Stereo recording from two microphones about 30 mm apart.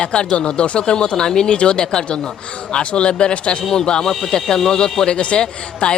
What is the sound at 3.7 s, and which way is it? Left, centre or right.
Speech, left.